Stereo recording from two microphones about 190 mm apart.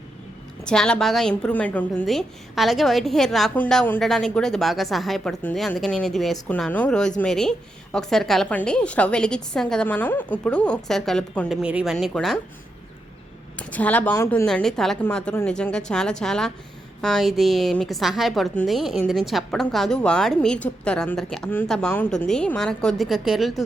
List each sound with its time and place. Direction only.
0.6 s a woman's voice: 5° left (ahead or behind)
13.6 s a woman's voice: 10° left (ahead or behind)